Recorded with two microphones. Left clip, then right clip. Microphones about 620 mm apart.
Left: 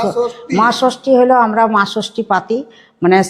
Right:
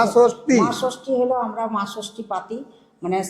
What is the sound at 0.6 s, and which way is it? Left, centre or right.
Speech, left.